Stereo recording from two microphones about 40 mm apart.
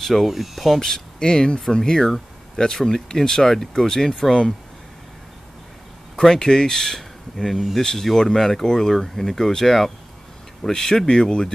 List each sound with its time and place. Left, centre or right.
0.0 s speech: centre
0.7 s speech: centre
6.1 s speech: centre